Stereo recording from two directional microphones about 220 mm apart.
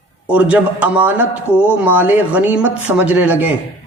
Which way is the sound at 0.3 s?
5° right (ahead or behind).